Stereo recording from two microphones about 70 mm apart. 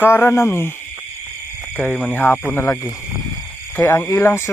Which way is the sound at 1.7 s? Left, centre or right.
Left.